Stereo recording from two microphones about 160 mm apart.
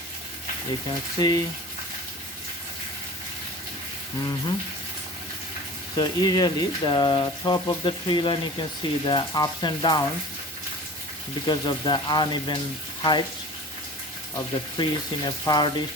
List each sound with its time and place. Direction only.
0.9 s speech: 25° left (ahead or behind)
6.0 s speech: 25° left (ahead or behind)
11.4 s speech: 25° left (ahead or behind)
14.3 s speech: 25° left (ahead or behind)